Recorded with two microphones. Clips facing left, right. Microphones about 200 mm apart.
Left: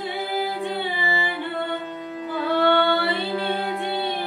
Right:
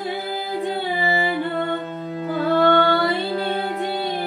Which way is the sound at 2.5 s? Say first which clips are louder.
Right 2 dB; 40° right (ahead or behind).